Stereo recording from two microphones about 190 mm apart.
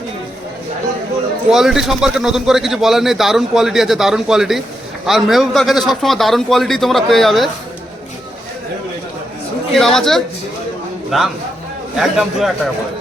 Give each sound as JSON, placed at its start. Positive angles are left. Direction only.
{"t": 1.5, "sound": "speech", "side_deg": 0}
{"t": 9.7, "sound": "speech", "side_deg": 0}